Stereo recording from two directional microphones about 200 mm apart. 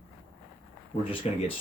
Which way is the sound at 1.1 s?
30° left (ahead or behind).